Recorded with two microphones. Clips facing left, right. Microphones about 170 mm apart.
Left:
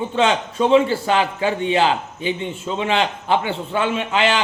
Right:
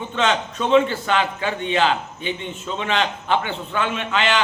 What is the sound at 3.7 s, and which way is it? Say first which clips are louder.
Speech: left 3 dB; 30° left (ahead or behind).